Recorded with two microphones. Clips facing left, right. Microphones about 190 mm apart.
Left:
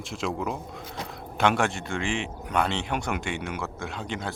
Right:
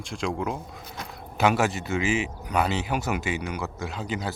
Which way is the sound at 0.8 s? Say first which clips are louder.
Left 2 dB; 30° left (ahead or behind).